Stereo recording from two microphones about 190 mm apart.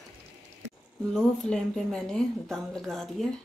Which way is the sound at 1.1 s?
5° left (ahead or behind).